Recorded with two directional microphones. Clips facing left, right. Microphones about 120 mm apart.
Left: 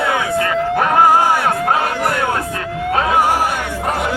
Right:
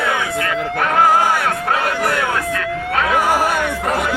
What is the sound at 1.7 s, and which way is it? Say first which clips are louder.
Chatter: left 1 dB; 35° left (ahead or behind).